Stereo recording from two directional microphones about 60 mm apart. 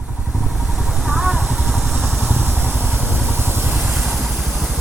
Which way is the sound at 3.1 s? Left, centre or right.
Right.